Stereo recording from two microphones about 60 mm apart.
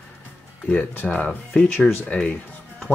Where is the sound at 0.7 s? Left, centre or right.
Left.